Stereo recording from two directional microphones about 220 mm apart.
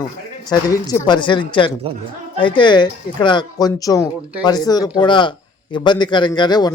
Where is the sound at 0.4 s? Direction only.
20° left (ahead or behind).